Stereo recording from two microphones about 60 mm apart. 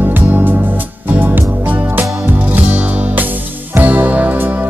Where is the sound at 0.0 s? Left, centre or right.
Right.